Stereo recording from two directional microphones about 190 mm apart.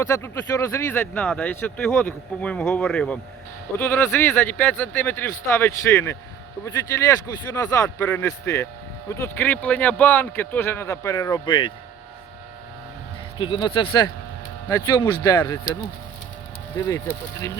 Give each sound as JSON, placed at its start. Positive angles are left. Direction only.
{"t": 0.0, "sound": "speech", "side_deg": 15}
{"t": 13.4, "sound": "speech", "side_deg": 25}